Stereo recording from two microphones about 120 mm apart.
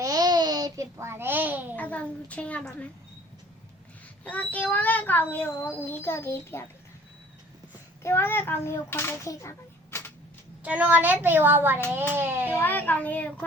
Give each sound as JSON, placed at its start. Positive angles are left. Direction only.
{"t": 0.0, "sound": "babbling", "side_deg": -30}
{"t": 1.7, "sound": "a child's voice", "side_deg": 10}
{"t": 4.2, "sound": "a child's voice", "side_deg": 10}
{"t": 8.0, "sound": "a child's voice", "side_deg": 20}
{"t": 10.6, "sound": "a woman's voice", "side_deg": -10}
{"t": 12.6, "sound": "a child's voice", "side_deg": 15}